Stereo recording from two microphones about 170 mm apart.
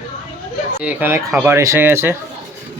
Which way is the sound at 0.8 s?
15° right (ahead or behind).